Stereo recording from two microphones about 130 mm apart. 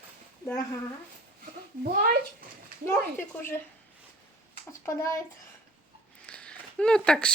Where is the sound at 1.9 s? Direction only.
90° right.